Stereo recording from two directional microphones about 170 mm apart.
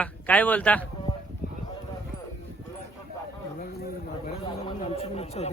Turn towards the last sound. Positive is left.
turn(degrees=35)  # may be behind; listen again after turning